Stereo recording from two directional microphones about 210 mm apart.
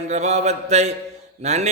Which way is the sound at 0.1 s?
30° right (ahead or behind).